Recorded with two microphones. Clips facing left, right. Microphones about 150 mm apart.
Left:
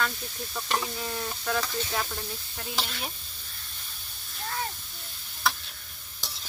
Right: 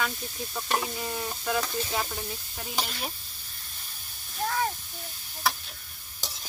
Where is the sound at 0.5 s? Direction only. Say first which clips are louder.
Right 1 dB; 5° right (ahead or behind).